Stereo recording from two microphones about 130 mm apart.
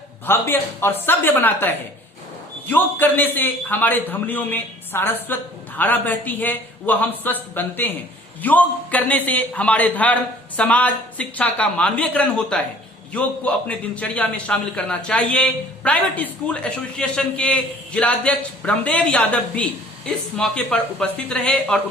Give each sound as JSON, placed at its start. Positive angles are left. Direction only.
{"t": 0.3, "sound": "a man's voice", "side_deg": 15}